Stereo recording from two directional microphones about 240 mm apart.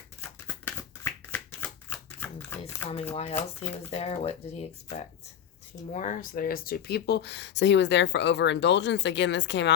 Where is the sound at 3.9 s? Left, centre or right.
Left.